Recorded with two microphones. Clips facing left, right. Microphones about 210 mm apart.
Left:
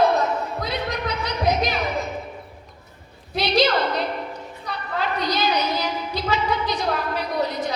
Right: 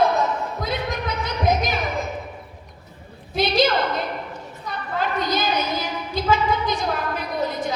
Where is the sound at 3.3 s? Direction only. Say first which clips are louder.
Even; 50° right (ahead or behind).